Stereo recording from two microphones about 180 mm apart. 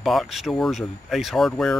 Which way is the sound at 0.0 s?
Centre (ahead or behind).